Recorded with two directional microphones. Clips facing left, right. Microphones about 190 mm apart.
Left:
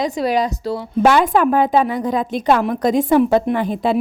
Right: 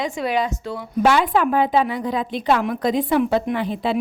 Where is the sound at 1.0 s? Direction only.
45° left (ahead or behind).